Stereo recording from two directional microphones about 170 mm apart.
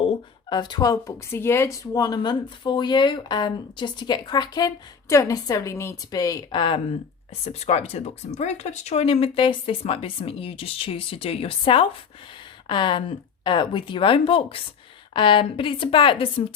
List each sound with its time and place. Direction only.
0.0 s speech: 30° left (ahead or behind)